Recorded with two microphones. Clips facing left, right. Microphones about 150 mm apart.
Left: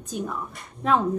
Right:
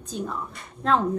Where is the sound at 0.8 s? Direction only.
5° left (ahead or behind).